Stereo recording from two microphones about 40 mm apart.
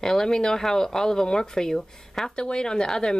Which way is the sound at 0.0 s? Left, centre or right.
Centre.